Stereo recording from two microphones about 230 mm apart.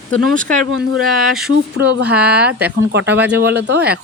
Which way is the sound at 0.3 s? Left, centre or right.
Centre.